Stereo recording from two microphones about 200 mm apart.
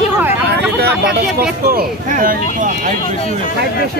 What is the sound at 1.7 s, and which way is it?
Speech, 45° right (ahead or behind).